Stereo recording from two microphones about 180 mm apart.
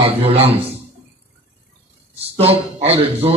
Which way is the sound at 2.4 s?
35° right (ahead or behind).